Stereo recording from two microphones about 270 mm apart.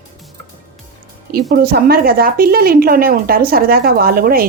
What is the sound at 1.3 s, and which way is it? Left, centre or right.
Speech, right.